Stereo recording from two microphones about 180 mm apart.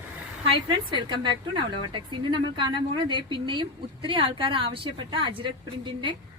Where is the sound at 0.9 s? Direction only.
25° right (ahead or behind).